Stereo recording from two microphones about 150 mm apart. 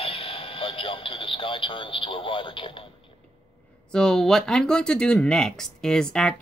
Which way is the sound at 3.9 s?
5° left (ahead or behind).